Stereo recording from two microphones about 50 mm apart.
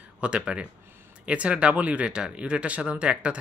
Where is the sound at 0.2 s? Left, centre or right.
Right.